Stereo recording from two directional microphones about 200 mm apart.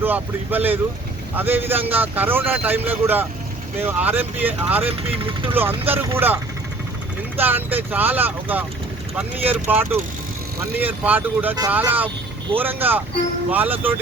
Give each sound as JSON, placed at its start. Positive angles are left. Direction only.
{"t": 0.0, "sound": "a man's voice", "side_deg": -10}